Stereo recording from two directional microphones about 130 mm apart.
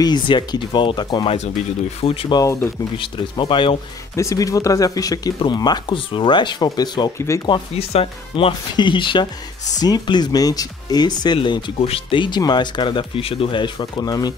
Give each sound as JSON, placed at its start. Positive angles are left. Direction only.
{"t": 0.0, "sound": "speech", "side_deg": 35}
{"t": 2.3, "sound": "speech", "side_deg": 25}
{"t": 3.0, "sound": "speech", "side_deg": 40}
{"t": 4.1, "sound": "speech", "side_deg": 25}
{"t": 7.7, "sound": "speech", "side_deg": 50}